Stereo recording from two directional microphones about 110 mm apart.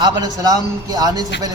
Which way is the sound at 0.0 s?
35° right (ahead or behind).